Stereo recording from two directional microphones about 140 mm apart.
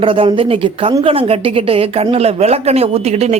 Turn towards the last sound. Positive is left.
turn(degrees=-50)  # may be behind; listen again after turning